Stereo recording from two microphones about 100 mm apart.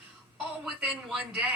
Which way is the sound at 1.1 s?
10° right (ahead or behind).